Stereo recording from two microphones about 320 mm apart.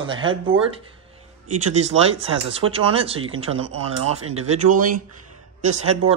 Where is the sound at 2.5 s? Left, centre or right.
Centre.